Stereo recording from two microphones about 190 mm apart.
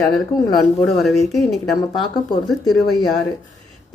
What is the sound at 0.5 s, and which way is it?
Speech, centre (ahead or behind).